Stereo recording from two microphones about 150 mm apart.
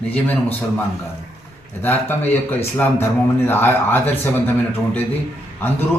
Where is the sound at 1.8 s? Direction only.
15° left (ahead or behind).